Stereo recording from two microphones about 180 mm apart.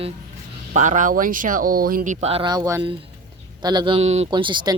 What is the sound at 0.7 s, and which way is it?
Speech, 45° right (ahead or behind).